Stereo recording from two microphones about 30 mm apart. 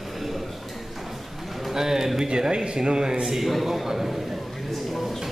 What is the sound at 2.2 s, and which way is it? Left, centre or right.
Speech, right.